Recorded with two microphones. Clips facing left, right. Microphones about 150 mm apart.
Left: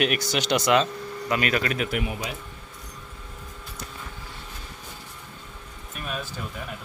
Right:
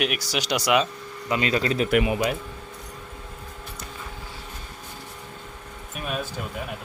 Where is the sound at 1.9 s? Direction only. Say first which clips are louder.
Right 8 dB; 80° right.